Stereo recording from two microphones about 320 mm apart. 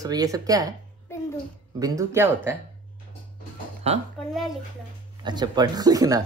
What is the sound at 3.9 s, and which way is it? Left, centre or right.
Speech, centre.